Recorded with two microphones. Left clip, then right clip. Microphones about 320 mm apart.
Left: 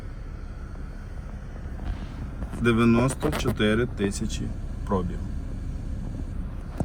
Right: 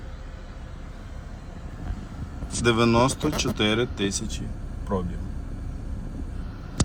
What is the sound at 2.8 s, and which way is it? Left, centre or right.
Speech, centre.